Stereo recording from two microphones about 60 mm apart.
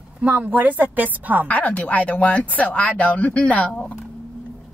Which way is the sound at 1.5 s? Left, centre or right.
Left.